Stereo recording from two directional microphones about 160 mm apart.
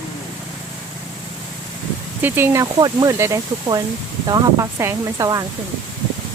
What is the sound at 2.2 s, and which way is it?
Speech, 15° right (ahead or behind).